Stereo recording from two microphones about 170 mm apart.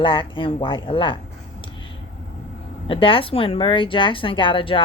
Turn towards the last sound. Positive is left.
turn(degrees=30)  # may be behind; listen again after turning